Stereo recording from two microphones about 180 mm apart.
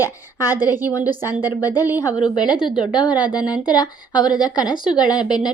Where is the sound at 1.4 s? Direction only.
10° right (ahead or behind).